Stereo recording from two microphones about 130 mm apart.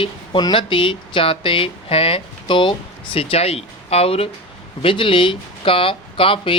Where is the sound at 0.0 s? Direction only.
40° left (ahead or behind).